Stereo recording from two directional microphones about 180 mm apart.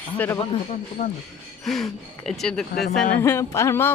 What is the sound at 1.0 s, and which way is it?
Speech, 50° left (ahead or behind).